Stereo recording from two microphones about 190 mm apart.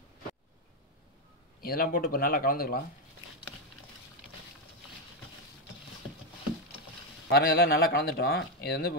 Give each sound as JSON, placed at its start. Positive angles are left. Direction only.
{"t": 1.6, "sound": "speech", "side_deg": 50}
{"t": 7.2, "sound": "speech", "side_deg": 55}